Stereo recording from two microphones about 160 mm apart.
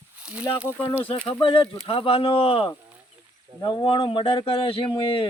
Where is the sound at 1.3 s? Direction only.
35° left (ahead or behind).